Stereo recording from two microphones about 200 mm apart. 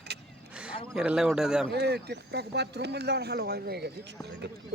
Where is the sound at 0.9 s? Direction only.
5° right (ahead or behind).